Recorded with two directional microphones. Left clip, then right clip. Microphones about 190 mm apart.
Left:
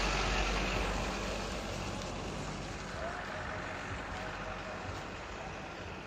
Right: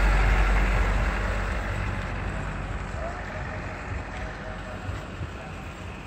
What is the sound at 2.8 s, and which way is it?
Vehicle, 35° right (ahead or behind).